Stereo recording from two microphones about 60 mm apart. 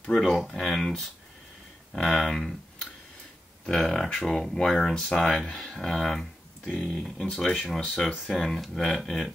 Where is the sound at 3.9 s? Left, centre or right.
Centre.